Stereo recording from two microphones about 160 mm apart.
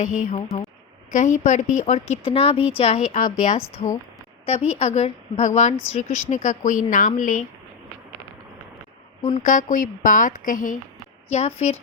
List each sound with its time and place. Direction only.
0.0 s a woman's voice: 50° left (ahead or behind)
9.2 s a woman's voice: 50° left (ahead or behind)
11.3 s a woman's voice: 45° left (ahead or behind)